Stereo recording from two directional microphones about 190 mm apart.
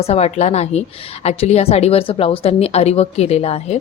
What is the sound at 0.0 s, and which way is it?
A woman's voice, 35° left (ahead or behind).